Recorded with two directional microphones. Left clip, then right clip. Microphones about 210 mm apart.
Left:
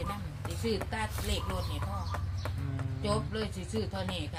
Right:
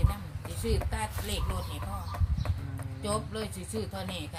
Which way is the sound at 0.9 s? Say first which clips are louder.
Even; 15° right (ahead or behind).